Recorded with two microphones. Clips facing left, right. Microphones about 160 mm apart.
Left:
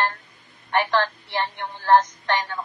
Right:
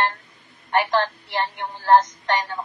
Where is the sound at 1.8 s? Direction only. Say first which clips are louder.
Right 1 dB; 15° right (ahead or behind).